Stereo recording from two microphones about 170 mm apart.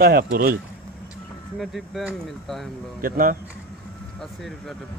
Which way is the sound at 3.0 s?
55° right (ahead or behind).